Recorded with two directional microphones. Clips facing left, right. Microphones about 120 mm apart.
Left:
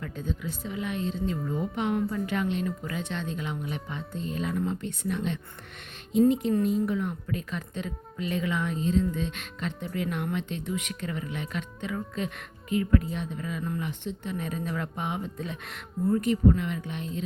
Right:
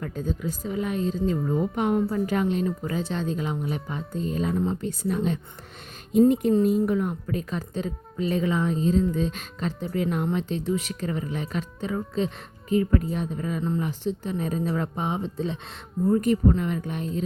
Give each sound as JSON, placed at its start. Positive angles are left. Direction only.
{"t": 0.0, "sound": "speech", "side_deg": -40}
{"t": 6.1, "sound": "speech", "side_deg": -50}
{"t": 16.2, "sound": "speech", "side_deg": -40}